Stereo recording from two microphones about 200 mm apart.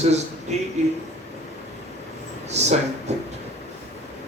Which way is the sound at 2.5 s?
35° right (ahead or behind).